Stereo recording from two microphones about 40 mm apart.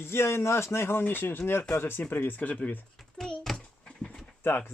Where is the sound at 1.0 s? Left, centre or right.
Left.